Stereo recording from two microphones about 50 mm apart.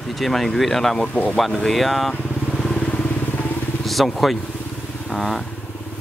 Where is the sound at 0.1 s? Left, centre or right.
Centre.